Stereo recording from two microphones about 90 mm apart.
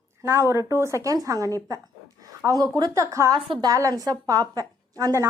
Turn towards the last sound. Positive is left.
turn(degrees=-40)  # may be behind; listen again after turning